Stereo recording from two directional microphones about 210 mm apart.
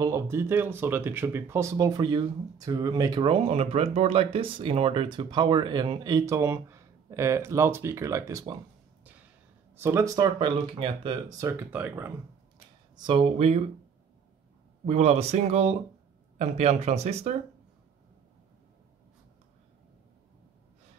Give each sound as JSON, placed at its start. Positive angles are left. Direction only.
{"t": 0.0, "sound": "speech", "side_deg": -15}
{"t": 9.8, "sound": "speech", "side_deg": -15}
{"t": 12.9, "sound": "speech", "side_deg": -25}
{"t": 14.9, "sound": "speech", "side_deg": -30}